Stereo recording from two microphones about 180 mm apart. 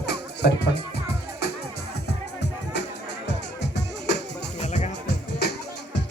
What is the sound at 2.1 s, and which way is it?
Music, 70° left (ahead or behind).